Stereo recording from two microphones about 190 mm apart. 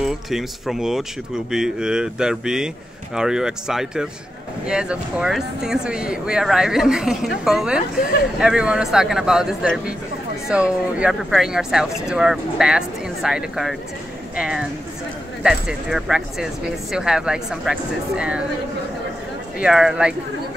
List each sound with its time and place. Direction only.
0.0 s speech: centre (ahead or behind)
11.0 s speech: centre (ahead or behind)
19.6 s speech: 5° right (ahead or behind)